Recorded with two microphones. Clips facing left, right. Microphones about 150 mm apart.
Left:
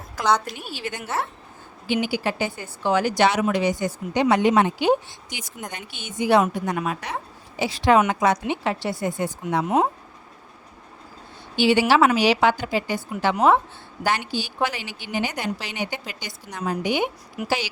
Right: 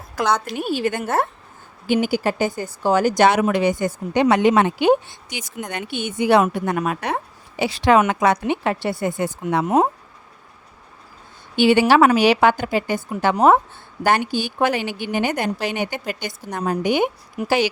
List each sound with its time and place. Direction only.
0.4 s speech: 55° right (ahead or behind); by 5.5 s 85° right
5.7 s a woman's voice: 60° right (ahead or behind)
7.6 s a woman's voice: 70° right (ahead or behind)
9.6 s speech: 45° right (ahead or behind)
11.5 s speech: 55° right (ahead or behind)
17.4 s speech: 35° right (ahead or behind)